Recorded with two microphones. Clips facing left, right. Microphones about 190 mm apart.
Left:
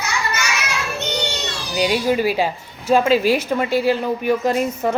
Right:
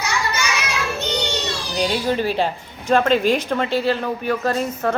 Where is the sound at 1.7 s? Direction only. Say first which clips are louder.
Left 3 dB; 10° left (ahead or behind).